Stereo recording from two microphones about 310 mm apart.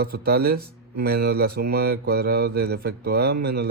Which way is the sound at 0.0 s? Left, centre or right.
Right.